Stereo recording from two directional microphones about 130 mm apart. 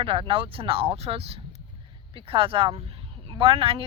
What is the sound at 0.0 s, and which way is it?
A woman's voice, 45° right (ahead or behind).